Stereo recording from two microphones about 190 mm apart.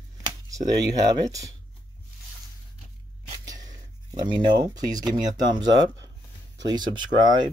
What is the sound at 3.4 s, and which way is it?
Speech, 20° right (ahead or behind).